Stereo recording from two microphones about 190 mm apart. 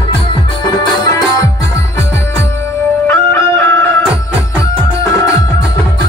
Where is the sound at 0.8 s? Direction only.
20° left (ahead or behind).